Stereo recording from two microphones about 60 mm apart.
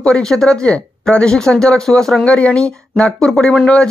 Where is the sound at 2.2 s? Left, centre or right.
Centre.